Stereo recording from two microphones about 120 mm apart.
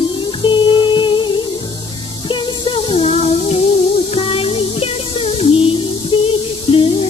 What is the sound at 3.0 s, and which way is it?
Music, 60° left (ahead or behind).